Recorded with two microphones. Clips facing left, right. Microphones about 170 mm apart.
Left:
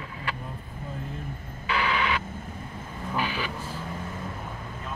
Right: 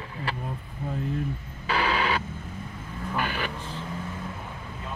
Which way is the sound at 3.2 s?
55° right (ahead or behind).